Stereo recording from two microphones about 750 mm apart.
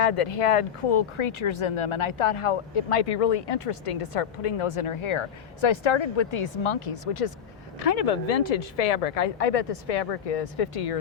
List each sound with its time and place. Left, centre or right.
0.0 s speech: left